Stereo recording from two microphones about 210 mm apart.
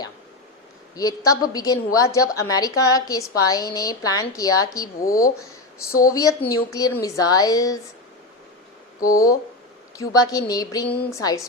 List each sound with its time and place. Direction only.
0.9 s a woman's voice: 15° left (ahead or behind)
4.9 s a woman's voice: 40° left (ahead or behind)
6.5 s a woman's voice: 15° left (ahead or behind)
9.0 s a woman's voice: 15° left (ahead or behind)